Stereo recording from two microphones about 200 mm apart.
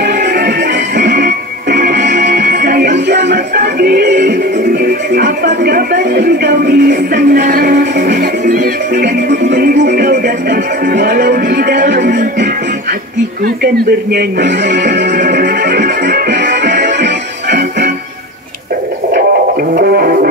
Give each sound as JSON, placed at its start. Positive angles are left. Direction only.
{"t": 0.0, "sound": "music", "side_deg": -55}
{"t": 5.1, "sound": "music", "side_deg": -55}
{"t": 14.1, "sound": "speech", "side_deg": -60}
{"t": 15.1, "sound": "music", "side_deg": -50}
{"t": 19.7, "sound": "music", "side_deg": -45}